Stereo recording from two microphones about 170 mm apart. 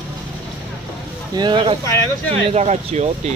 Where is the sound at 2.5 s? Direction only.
40° right (ahead or behind).